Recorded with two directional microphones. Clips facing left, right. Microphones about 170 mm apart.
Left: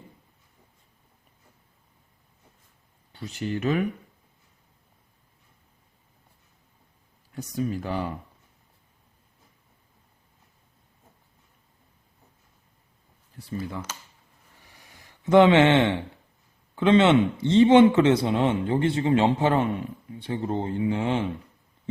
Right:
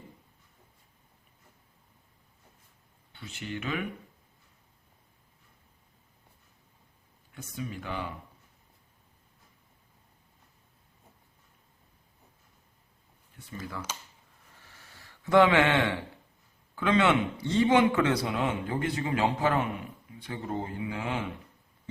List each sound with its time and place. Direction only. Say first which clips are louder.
3.1 s speech: left 8 dB; 40° left (ahead or behind)
7.3 s speech: left 9 dB; 40° left (ahead or behind)
13.3 s speech: left 7 dB; 35° left (ahead or behind)
14.6 s a sound: left 2 dB; 15° left (ahead or behind)
16.7 s a man's voice: left 7 dB; 25° left (ahead or behind)